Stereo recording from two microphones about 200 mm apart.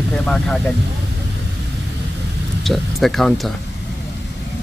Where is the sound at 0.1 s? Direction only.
5° left (ahead or behind).